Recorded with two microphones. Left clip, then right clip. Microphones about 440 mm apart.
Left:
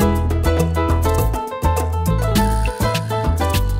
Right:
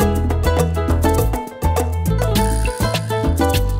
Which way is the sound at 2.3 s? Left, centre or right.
Right.